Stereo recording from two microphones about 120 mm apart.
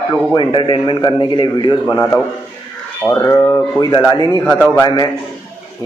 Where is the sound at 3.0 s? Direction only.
25° left (ahead or behind).